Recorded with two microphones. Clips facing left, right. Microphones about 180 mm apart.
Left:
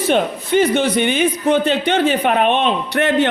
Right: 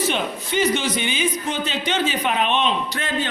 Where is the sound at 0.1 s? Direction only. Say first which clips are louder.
Left 8 dB; 55° left (ahead or behind).